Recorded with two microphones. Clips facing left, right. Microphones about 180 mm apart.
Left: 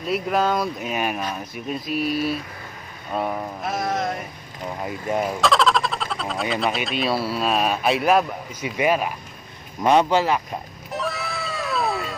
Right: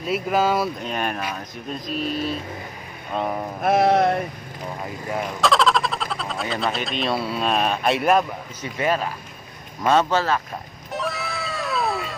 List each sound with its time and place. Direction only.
0.0 s speech: centre (ahead or behind)
0.7 s speech: 5° left (ahead or behind)
3.6 s music: 65° right (ahead or behind)
5.4 s speech: centre (ahead or behind)
10.9 s cat: centre (ahead or behind)